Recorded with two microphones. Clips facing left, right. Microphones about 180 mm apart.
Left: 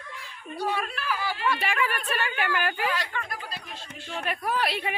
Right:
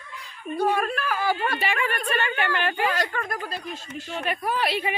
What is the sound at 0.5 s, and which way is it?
Speech, 50° right (ahead or behind).